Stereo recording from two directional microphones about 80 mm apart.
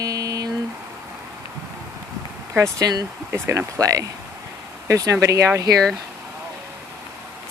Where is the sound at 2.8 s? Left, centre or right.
Right.